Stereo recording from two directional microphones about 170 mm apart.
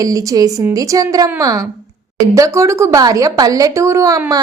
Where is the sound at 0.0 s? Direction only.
20° right (ahead or behind).